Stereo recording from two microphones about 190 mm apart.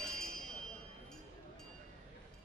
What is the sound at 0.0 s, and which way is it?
Bell, 5° left (ahead or behind).